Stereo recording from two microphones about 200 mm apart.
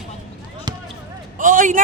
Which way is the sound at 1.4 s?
40° right (ahead or behind).